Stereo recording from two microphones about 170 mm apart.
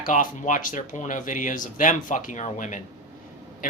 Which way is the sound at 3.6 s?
55° left (ahead or behind).